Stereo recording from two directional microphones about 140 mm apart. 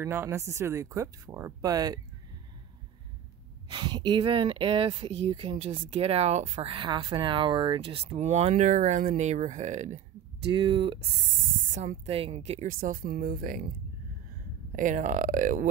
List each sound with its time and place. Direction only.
0.0 s speech: 15° right (ahead or behind)
3.6 s speech: 35° right (ahead or behind); by 9.9 s 55° right (ahead or behind)
10.5 s speech: 35° right (ahead or behind)
11.7 s speech: 65° right (ahead or behind)
12.1 s speech: 45° right (ahead or behind)
12.6 s speech: 90° right
14.8 s speech: 70° right (ahead or behind)